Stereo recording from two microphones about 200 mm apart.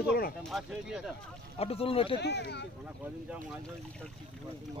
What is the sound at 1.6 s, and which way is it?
Speech, 30° left (ahead or behind).